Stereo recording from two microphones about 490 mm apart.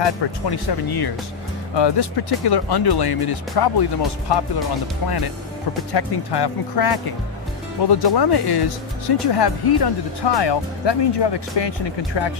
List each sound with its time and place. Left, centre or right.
0.0 s speech: left